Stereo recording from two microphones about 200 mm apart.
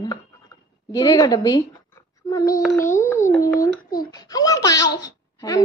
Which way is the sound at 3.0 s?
10° left (ahead or behind).